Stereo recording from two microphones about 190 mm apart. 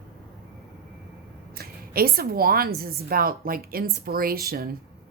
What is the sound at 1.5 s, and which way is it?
A woman's voice, 50° right (ahead or behind).